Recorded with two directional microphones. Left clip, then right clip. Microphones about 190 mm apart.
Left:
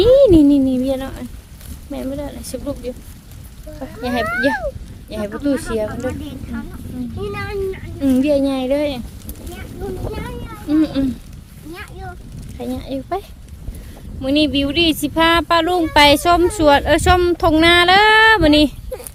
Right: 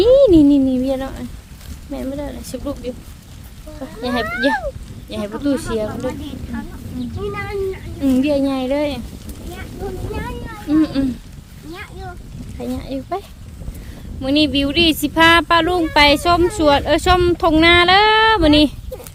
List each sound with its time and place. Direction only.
0.2 s a sound: 15° left (ahead or behind)
3.8 s speech: 5° left (ahead or behind)
6.5 s chicken: 15° right (ahead or behind)
7.3 s a sound: 5° left (ahead or behind)
10.7 s speech: 5° left (ahead or behind)
11.7 s boat: 10° left (ahead or behind)
12.5 s speech: 15° left (ahead or behind)
14.2 s speech: 5° left (ahead or behind)